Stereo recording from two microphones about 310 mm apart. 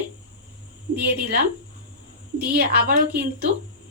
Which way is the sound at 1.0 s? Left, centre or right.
Right.